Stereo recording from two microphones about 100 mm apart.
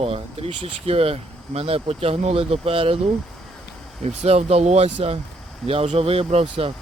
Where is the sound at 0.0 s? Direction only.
80° right.